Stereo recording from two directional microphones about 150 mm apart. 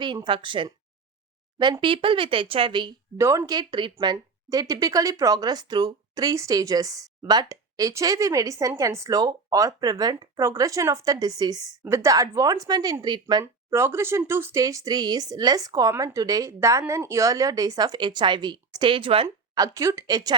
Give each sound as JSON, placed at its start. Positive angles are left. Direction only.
{"t": 0.0, "sound": "speech", "side_deg": -30}
{"t": 3.2, "sound": "speech", "side_deg": -20}
{"t": 13.4, "sound": "speech", "side_deg": -15}
{"t": 19.6, "sound": "speech", "side_deg": -20}